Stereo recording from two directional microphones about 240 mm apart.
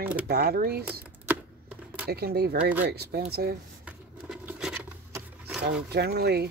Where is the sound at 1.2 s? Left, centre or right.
Centre.